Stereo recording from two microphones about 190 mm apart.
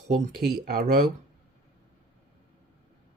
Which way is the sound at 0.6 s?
45° right (ahead or behind).